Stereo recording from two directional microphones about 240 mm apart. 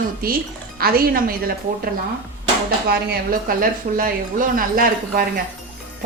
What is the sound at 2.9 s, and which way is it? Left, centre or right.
Speech, right.